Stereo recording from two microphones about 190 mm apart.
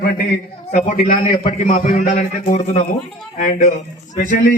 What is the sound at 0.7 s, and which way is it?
A man's voice, 40° left (ahead or behind).